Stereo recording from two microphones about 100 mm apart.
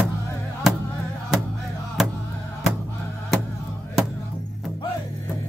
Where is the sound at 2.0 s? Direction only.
5° right (ahead or behind).